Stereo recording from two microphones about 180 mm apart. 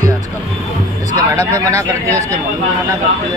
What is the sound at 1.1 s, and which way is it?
Speech, 15° right (ahead or behind).